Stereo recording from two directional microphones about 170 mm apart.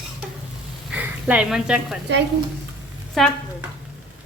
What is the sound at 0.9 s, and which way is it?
Speech, 5° right (ahead or behind).